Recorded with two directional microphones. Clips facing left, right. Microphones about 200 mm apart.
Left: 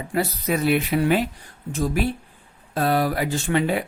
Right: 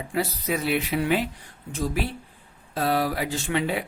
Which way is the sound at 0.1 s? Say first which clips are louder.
Left 3 dB; 50° left (ahead or behind).